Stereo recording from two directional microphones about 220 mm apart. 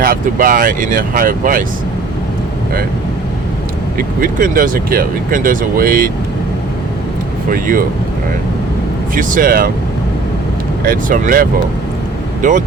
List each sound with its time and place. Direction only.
0.0 s speech: 40° right (ahead or behind)
3.9 s speech: 40° right (ahead or behind)
7.5 s speech: 40° right (ahead or behind)
9.1 s speech: 40° right (ahead or behind)
10.8 s speech: 40° right (ahead or behind)